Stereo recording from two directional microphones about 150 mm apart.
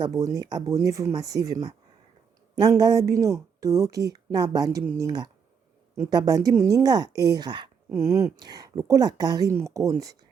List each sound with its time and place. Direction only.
0.0 s speech: 25° right (ahead or behind)
7.9 s speech: 15° right (ahead or behind)